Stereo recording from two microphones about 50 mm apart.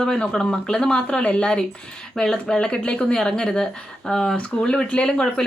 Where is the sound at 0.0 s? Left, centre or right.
Centre.